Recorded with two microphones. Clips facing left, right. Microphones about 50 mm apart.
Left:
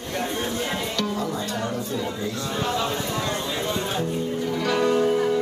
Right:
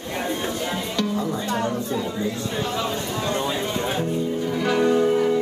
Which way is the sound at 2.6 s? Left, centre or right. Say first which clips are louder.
Left 2 dB; centre.